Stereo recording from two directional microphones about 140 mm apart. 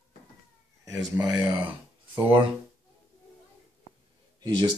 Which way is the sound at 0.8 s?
25° right (ahead or behind).